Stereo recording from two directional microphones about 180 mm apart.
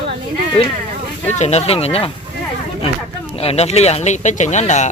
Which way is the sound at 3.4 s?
35° left (ahead or behind).